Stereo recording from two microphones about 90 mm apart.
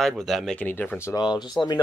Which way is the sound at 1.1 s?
55° left (ahead or behind).